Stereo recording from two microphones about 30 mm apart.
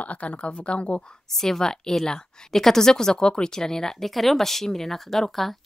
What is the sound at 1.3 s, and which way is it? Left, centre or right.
Speech, centre.